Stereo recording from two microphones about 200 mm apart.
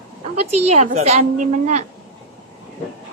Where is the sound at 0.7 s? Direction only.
35° right (ahead or behind).